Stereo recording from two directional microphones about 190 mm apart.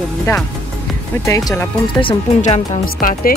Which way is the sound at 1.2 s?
15° left (ahead or behind).